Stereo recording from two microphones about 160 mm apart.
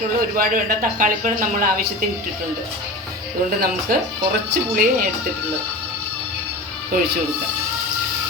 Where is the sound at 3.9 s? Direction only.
70° right (ahead or behind).